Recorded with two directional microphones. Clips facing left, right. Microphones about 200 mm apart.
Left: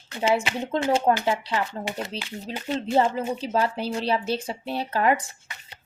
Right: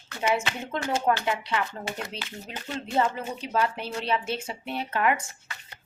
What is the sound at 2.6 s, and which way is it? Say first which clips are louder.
Speech: left 4 dB; 30° left (ahead or behind).